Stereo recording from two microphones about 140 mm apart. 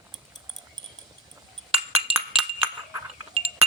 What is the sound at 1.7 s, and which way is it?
Chink, 10° right (ahead or behind).